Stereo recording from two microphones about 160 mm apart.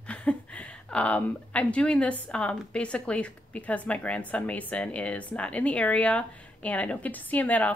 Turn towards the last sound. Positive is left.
turn(degrees=10)  # may be behind; listen again after turning